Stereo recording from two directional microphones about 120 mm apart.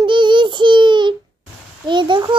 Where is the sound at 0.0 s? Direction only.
40° right (ahead or behind).